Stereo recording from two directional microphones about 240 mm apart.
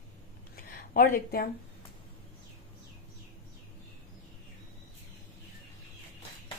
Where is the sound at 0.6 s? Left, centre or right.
Left.